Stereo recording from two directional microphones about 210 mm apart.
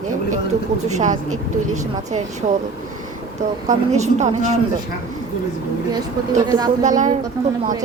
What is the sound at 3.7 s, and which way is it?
Speech, 35° right (ahead or behind).